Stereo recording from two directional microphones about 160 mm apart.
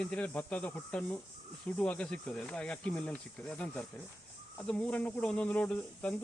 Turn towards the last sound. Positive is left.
turn(degrees=5)  # may be behind; listen again after turning